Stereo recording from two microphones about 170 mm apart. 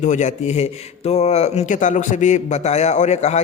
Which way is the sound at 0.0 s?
45° left (ahead or behind).